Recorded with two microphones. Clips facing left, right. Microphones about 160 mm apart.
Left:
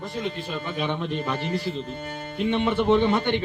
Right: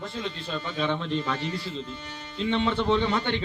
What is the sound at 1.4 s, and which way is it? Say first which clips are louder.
Speech: left 4 dB; 55° left (ahead or behind).